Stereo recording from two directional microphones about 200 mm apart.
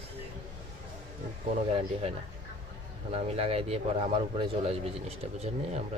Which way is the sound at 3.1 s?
30° right (ahead or behind).